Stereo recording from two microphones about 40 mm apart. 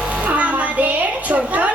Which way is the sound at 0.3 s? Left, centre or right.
Right.